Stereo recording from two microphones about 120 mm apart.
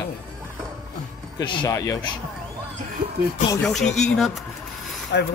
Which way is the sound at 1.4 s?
40° left (ahead or behind).